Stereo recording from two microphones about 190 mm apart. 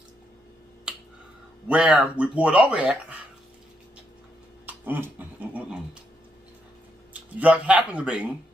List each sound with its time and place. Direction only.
1.7 s speech: 5° right (ahead or behind)
4.6 s dog: 10° right (ahead or behind)
7.2 s speech: 5° right (ahead or behind)